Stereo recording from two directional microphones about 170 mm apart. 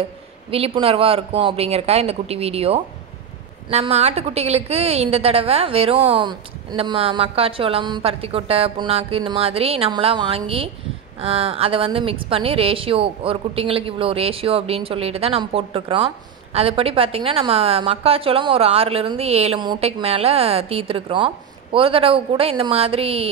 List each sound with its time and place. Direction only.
0.5 s a woman's voice: 35° right (ahead or behind)